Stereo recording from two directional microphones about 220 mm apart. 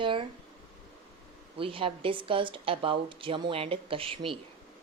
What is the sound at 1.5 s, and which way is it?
Speech, 25° right (ahead or behind).